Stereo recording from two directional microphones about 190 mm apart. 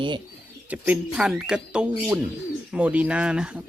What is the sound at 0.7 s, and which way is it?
Speech, 5° right (ahead or behind).